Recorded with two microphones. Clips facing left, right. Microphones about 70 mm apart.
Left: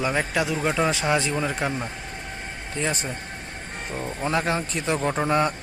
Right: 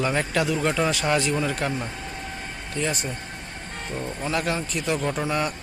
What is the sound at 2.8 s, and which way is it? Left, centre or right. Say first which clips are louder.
Speech: left 2 dB; left.